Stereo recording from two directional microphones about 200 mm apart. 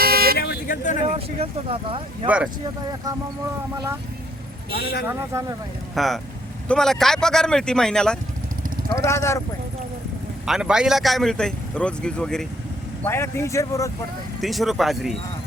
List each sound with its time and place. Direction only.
0.0 s vehicle: 50° right (ahead or behind)
0.3 s vehicle: 50° left (ahead or behind)
1.0 s speech: 30° right (ahead or behind)
2.2 s speech: 5° right (ahead or behind)
4.7 s speech: 50° left (ahead or behind)
5.0 s speech: 15° right (ahead or behind)
5.9 s a man's voice: centre (ahead or behind)
9.0 s speech: 15° left (ahead or behind)
10.4 s a man's voice: 5° right (ahead or behind); by 13.9 s 15° left (ahead or behind)
14.4 s a man's voice: centre (ahead or behind)